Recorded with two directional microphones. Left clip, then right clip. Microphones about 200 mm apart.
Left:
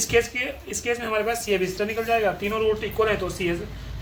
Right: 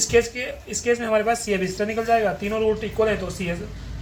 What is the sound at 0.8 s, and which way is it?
Speech, 20° left (ahead or behind).